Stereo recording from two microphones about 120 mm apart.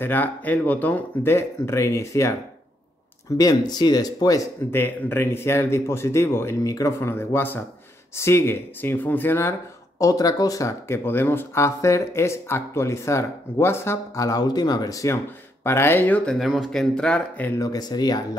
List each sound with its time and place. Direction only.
0.0 s speech: 15° left (ahead or behind)
3.3 s speech: 35° left (ahead or behind); by 16.2 s 15° left (ahead or behind)
16.3 s speech: centre (ahead or behind)
17.6 s speech: 30° left (ahead or behind)